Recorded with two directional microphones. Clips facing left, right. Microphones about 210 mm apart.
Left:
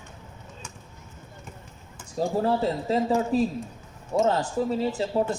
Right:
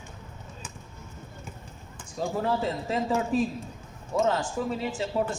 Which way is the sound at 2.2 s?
35° left (ahead or behind).